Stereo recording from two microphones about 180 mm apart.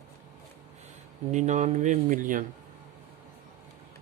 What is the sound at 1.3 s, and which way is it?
Speech, 40° right (ahead or behind).